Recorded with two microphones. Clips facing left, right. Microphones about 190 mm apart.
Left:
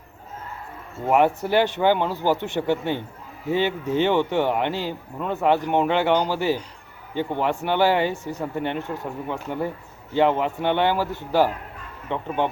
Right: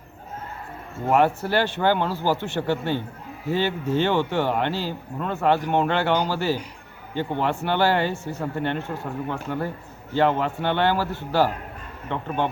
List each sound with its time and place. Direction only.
1.0 s speech: 15° left (ahead or behind)